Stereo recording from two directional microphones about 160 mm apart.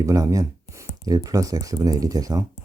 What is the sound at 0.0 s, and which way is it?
Speech, 20° right (ahead or behind).